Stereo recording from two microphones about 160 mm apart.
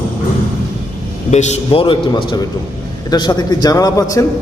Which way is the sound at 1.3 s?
45° left (ahead or behind).